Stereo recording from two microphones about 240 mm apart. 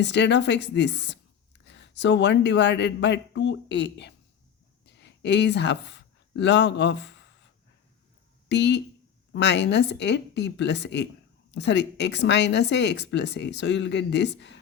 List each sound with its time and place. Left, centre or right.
0.0 s speech: left
8.4 s speech: left